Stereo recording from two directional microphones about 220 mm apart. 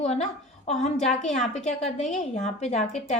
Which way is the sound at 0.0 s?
30° left (ahead or behind).